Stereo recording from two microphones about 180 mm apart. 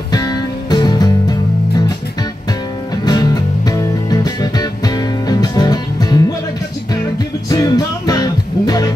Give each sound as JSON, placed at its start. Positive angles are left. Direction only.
{"t": 0.1, "sound": "music", "side_deg": 20}
{"t": 3.1, "sound": "music", "side_deg": 20}
{"t": 7.4, "sound": "music", "side_deg": 20}